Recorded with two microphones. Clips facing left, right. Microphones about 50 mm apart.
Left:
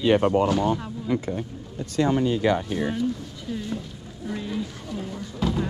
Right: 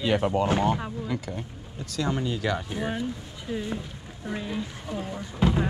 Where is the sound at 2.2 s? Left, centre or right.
Left.